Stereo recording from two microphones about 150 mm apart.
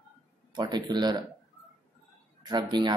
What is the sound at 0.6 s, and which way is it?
Speech, 30° right (ahead or behind).